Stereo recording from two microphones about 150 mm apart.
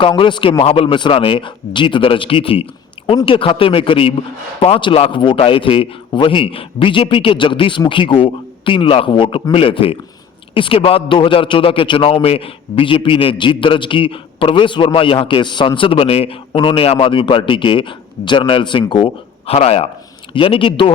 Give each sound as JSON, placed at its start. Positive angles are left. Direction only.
{"t": 0.0, "sound": "a man's voice", "side_deg": 35}